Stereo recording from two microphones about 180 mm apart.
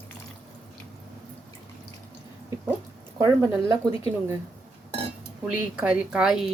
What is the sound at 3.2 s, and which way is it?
Speech, 20° right (ahead or behind).